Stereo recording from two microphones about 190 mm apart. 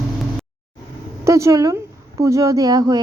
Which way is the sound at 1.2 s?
15° right (ahead or behind).